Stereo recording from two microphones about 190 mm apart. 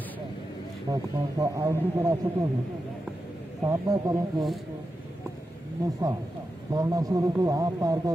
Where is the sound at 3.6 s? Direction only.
20° right (ahead or behind).